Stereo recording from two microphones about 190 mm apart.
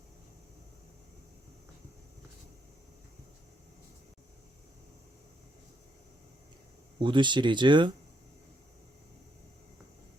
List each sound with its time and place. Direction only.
7.0 s speech: 25° right (ahead or behind)